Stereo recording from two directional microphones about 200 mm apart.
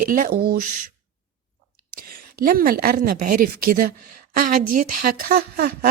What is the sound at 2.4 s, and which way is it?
A woman's voice, 45° right (ahead or behind).